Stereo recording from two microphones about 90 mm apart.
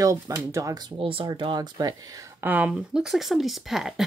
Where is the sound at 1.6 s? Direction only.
45° right (ahead or behind).